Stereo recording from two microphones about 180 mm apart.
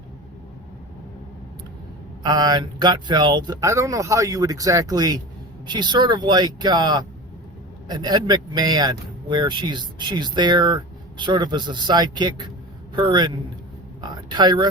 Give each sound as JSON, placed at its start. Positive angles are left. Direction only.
{"t": 2.2, "sound": "speech", "side_deg": -25}